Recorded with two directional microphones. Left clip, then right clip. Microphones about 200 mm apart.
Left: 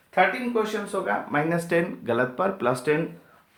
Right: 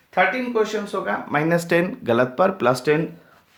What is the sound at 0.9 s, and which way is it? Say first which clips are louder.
Speech: right 2 dB; 55° right (ahead or behind).